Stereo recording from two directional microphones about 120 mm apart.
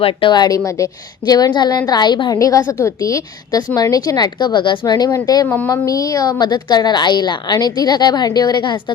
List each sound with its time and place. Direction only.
0.0 s a woman's voice: 45° left (ahead or behind)